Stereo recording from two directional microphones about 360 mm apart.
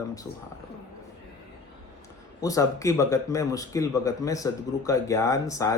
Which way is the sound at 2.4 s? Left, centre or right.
Centre.